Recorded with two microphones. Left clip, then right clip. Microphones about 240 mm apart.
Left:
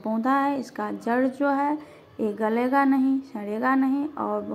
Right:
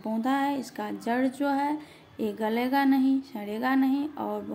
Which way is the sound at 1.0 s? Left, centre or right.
Centre.